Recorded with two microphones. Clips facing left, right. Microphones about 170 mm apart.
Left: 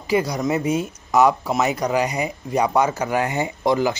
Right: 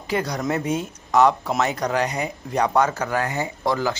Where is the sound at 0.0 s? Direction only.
10° left (ahead or behind).